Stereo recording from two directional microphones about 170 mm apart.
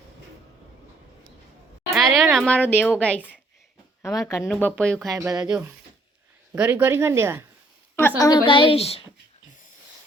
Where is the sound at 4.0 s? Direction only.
20° left (ahead or behind).